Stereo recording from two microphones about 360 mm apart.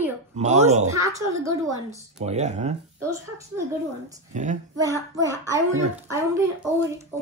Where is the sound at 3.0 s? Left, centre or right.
Centre.